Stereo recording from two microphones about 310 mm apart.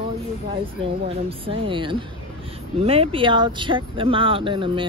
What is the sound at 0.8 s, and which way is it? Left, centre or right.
Speech, centre.